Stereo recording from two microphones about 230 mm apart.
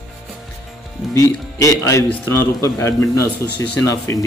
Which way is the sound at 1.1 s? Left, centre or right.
Centre.